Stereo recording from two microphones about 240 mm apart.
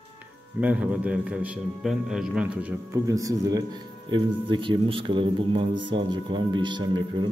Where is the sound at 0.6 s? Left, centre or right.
Centre.